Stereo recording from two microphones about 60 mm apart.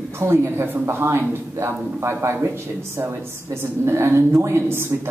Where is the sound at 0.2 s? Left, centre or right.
Right.